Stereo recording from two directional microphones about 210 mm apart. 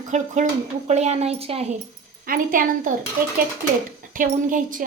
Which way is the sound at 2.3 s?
40° right (ahead or behind).